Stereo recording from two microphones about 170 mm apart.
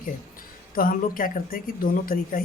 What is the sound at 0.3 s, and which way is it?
A woman's voice, 55° left (ahead or behind).